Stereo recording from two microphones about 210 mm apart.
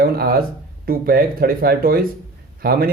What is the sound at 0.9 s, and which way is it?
Speech, 45° right (ahead or behind).